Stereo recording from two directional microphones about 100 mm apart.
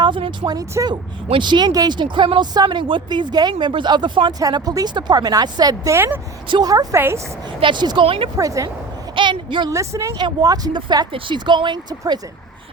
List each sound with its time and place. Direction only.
0.0 s speech: 55° right (ahead or behind)
0.8 s speech: 35° right (ahead or behind)
1.3 s speech: 50° right (ahead or behind)
6.9 s speech: 25° right (ahead or behind)
7.6 s speech: 50° right (ahead or behind)
8.0 s speech: 65° right (ahead or behind)
8.4 s speech: 35° right (ahead or behind)
9.1 s a sound: 55° right (ahead or behind)
9.6 s speech: 30° right (ahead or behind)